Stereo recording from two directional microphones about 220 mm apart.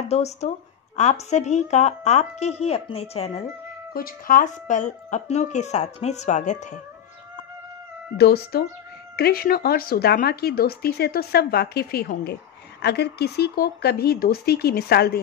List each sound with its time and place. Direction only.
0.1 s speech: 30° left (ahead or behind)
3.9 s speech: 40° left (ahead or behind)
8.2 s speech: 45° left (ahead or behind)